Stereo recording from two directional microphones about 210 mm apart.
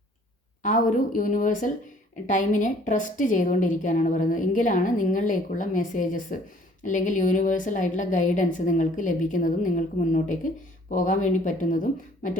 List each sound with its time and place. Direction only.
0.6 s a woman's voice: 40° left (ahead or behind)